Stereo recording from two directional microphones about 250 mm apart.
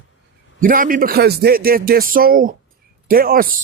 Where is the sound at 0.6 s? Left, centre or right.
Right.